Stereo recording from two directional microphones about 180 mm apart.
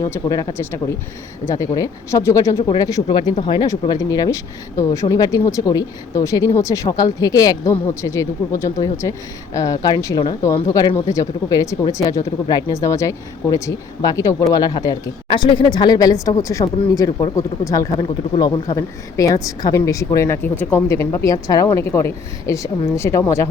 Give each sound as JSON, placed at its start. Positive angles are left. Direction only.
{"t": 0.0, "sound": "a woman's voice", "side_deg": 20}